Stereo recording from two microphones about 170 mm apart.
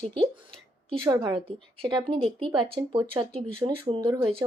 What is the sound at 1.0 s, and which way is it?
A woman's voice, 20° right (ahead or behind).